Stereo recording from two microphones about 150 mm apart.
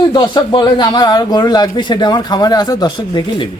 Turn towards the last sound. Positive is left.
turn(degrees=30)  # may be behind; listen again after turning